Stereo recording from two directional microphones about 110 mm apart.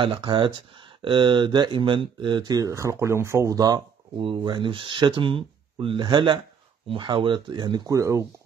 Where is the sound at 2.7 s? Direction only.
25° right (ahead or behind).